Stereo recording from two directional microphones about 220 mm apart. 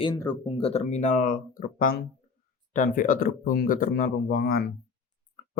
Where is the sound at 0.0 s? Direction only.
20° left (ahead or behind).